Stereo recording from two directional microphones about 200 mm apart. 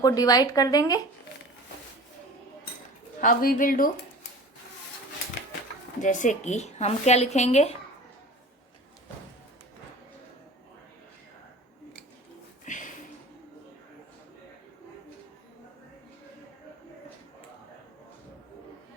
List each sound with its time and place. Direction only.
0.0 s speech: 15° left (ahead or behind)
3.2 s speech: 45° left (ahead or behind)
6.0 s a woman's voice: 40° left (ahead or behind)
12.6 s a sound: 40° left (ahead or behind)